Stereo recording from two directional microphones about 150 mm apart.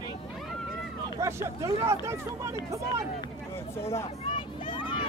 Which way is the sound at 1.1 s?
20° right (ahead or behind).